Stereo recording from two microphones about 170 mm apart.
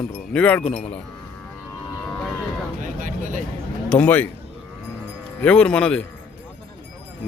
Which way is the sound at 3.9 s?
10° left (ahead or behind).